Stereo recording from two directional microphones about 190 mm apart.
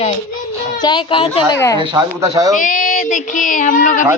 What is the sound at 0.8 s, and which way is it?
Speech, 25° left (ahead or behind).